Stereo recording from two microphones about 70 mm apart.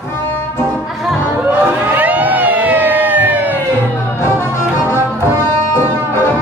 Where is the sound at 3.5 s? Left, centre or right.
Left.